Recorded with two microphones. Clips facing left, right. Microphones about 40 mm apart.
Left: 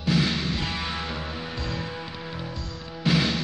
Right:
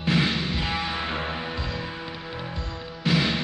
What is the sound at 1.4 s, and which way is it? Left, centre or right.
Music, centre.